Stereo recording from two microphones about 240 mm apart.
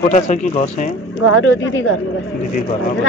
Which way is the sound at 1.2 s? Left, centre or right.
Left.